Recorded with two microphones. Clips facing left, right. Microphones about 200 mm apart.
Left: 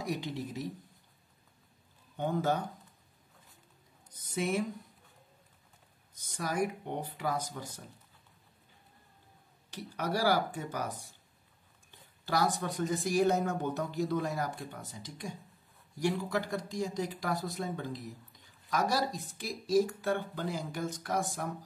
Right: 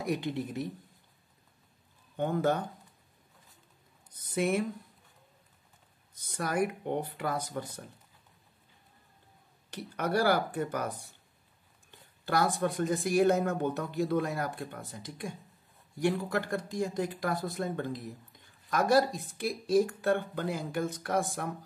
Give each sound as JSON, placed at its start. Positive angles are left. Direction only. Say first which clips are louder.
{"t": 0.0, "sound": "speech", "louder": "right 4 dB", "side_deg": -55}
{"t": 2.1, "sound": "speech", "louder": "right 2 dB", "side_deg": -55}
{"t": 4.2, "sound": "speech", "louder": "right 3 dB", "side_deg": -55}
{"t": 6.2, "sound": "speech", "louder": "right 2 dB", "side_deg": -55}
{"t": 9.7, "sound": "speech", "louder": "right 3 dB", "side_deg": -55}
{"t": 12.3, "sound": "speech", "louder": "right 3 dB", "side_deg": -55}